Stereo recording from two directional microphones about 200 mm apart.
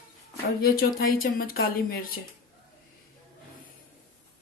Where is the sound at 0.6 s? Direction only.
50° left (ahead or behind).